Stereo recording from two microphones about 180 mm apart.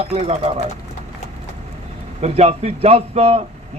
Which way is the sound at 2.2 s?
35° right (ahead or behind).